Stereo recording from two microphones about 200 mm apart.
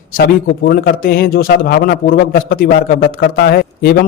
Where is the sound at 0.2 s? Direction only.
50° left (ahead or behind).